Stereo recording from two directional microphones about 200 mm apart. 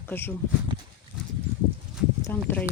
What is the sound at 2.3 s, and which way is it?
Speech, 10° left (ahead or behind).